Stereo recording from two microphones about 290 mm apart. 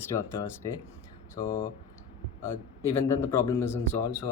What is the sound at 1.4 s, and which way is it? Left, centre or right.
Speech, left.